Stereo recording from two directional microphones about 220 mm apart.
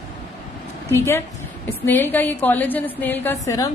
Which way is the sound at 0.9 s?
10° left (ahead or behind).